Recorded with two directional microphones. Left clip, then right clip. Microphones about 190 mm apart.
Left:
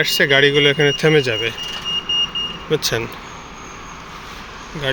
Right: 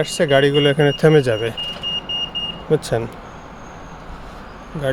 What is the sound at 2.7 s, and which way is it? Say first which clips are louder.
Speech: right 1 dB; 30° right (ahead or behind).